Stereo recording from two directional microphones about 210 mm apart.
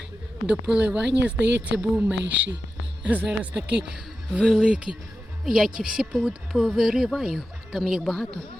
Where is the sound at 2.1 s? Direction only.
60° right (ahead or behind).